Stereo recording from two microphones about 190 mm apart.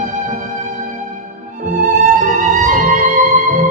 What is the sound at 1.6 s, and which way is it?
Music, 40° right (ahead or behind).